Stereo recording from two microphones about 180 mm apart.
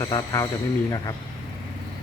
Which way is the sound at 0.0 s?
20° left (ahead or behind).